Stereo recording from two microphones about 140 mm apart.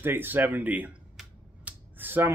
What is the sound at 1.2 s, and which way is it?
Finger snapping, 10° right (ahead or behind).